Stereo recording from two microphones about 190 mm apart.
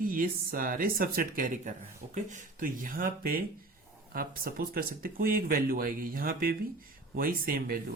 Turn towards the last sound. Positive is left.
turn(degrees=-50)  # may be behind; listen again after turning